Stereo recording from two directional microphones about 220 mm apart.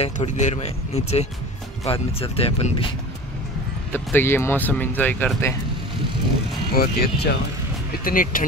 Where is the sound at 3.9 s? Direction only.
10° left (ahead or behind).